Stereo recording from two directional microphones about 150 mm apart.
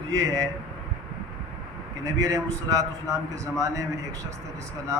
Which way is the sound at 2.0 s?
25° right (ahead or behind).